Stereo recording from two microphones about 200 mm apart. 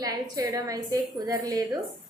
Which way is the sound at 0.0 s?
15° right (ahead or behind).